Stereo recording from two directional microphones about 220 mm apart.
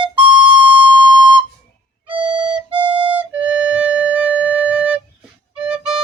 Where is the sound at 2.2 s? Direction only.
5° right (ahead or behind).